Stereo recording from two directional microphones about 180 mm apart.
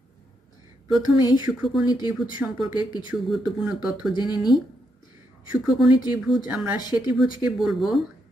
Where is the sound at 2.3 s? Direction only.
10° right (ahead or behind).